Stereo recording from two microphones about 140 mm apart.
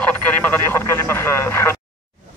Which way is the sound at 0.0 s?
10° left (ahead or behind).